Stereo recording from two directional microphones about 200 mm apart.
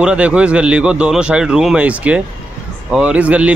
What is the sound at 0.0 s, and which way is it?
A man's voice, 5° right (ahead or behind).